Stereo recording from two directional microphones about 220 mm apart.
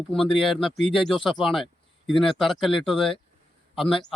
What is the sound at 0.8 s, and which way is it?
Speech, 25° left (ahead or behind).